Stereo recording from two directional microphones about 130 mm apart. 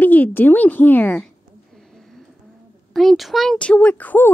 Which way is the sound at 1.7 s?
5° left (ahead or behind).